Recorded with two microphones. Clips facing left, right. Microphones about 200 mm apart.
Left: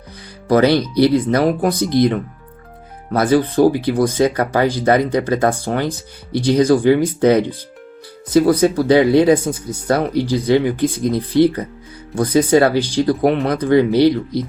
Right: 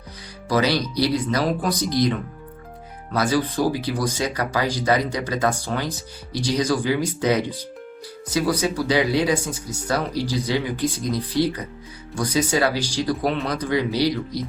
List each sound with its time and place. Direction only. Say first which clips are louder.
0.4 s speech: left 8 dB; 55° left (ahead or behind)